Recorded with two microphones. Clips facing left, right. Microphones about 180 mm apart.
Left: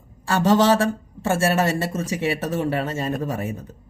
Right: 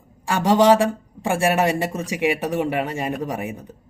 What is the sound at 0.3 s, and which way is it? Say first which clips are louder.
A woman's voice: right 2 dB; 15° right (ahead or behind).